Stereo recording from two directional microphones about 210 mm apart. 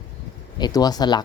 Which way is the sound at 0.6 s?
20° left (ahead or behind).